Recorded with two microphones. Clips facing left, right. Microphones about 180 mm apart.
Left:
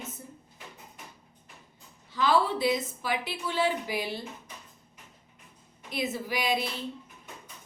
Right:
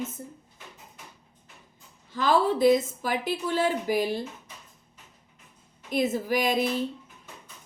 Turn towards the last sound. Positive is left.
turn(degrees=-45)  # may be behind; listen again after turning